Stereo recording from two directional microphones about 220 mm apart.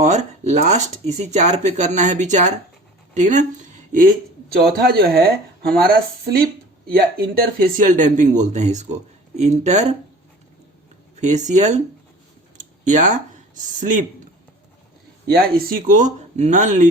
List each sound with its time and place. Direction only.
0.0 s speech: 30° right (ahead or behind)
11.2 s speech: 30° right (ahead or behind)
12.9 s speech: 35° right (ahead or behind)
15.3 s speech: 45° right (ahead or behind)